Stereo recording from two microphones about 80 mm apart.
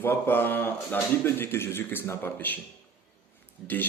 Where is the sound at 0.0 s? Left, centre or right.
Left.